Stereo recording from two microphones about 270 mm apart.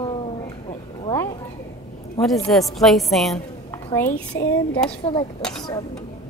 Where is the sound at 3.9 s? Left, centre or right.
Centre.